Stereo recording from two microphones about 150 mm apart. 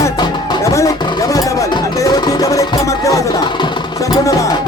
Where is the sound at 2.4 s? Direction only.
25° left (ahead or behind).